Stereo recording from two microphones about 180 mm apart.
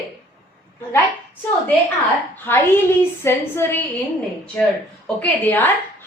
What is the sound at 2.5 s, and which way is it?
A woman's voice, 10° left (ahead or behind).